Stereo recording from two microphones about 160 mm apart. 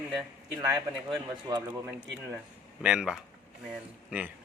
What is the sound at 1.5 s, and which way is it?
Speech, 25° right (ahead or behind).